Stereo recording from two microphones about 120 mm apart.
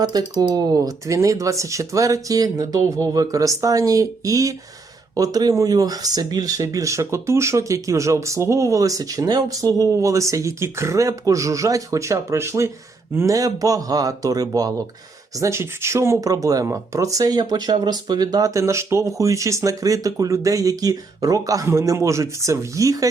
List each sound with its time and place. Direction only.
0.0 s speech: 35° right (ahead or behind)